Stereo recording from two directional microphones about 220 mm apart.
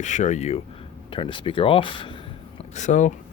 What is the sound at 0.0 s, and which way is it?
Speech, 35° left (ahead or behind).